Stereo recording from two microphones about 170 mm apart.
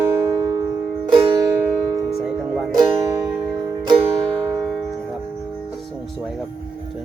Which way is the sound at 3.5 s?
25° right (ahead or behind).